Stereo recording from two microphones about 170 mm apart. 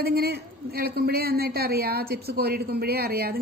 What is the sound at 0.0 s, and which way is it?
A man's voice, 65° right (ahead or behind).